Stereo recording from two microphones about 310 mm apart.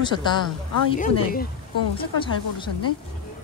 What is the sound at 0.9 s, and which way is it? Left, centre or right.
Speech, left.